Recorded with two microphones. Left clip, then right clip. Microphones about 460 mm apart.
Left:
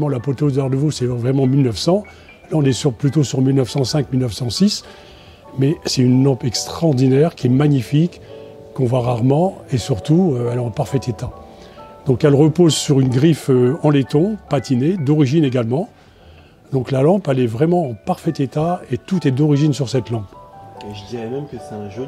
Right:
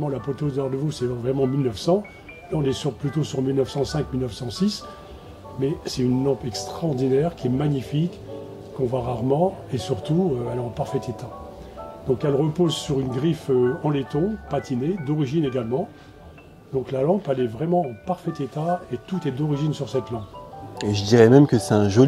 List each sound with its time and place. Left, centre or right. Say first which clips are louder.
0.0 s speech: left 7 dB; left
16.8 s speech: left 7 dB; left
20.7 s speech: right 10 dB; right